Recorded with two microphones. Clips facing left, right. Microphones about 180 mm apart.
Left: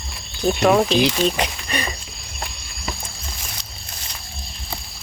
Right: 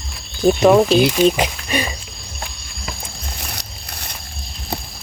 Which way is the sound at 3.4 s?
65° right (ahead or behind).